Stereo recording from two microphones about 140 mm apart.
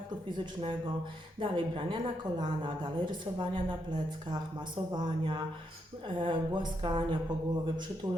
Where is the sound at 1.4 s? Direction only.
40° right (ahead or behind).